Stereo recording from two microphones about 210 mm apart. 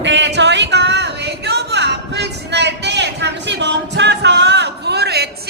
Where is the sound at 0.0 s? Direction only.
55° right (ahead or behind).